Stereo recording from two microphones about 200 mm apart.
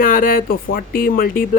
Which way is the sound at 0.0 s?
45° left (ahead or behind).